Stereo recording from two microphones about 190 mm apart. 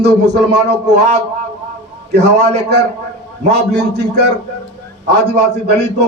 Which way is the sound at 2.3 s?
35° right (ahead or behind).